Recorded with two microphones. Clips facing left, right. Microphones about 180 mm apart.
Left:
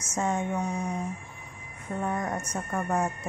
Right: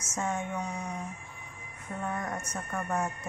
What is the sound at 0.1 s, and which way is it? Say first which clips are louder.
Speech: left 4 dB; 35° left (ahead or behind).